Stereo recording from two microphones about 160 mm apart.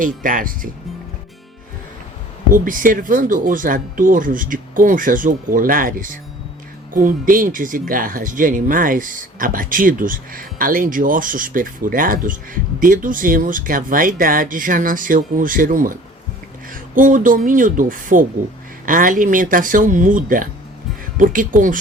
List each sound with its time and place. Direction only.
0.0 s speech: 60° right (ahead or behind)
2.5 s speech: 60° right (ahead or behind)